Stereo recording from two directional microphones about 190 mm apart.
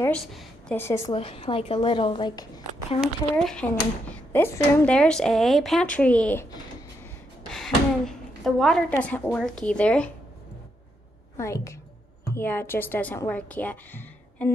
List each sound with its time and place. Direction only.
0.0 s a sound: 5° left (ahead or behind)
0.7 s speech: 15° left (ahead or behind)
1.1 s a woman's voice: 30° left (ahead or behind)
3.0 s speech: 5° left (ahead or behind)
7.5 s a sound: centre (ahead or behind)
8.5 s speech: centre (ahead or behind)
11.3 s a woman's voice: 15° left (ahead or behind)